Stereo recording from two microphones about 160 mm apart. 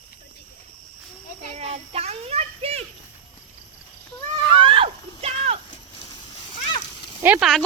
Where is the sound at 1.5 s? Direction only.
40° right (ahead or behind).